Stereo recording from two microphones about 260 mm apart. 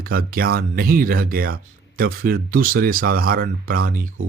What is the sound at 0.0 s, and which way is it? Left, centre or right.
A man's voice, right.